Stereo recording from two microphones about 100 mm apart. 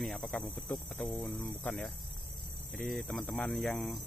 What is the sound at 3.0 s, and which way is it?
Speech, 10° left (ahead or behind).